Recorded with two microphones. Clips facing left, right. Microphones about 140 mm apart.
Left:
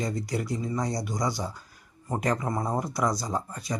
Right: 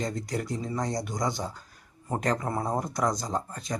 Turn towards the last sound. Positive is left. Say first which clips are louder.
# even
turn(degrees=0)  # may be behind; listen again after turning